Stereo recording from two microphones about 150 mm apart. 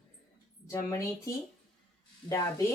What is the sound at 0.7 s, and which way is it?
Speech, 20° left (ahead or behind).